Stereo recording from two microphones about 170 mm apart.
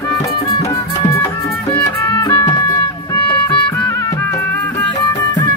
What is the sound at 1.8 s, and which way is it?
Music, 20° left (ahead or behind).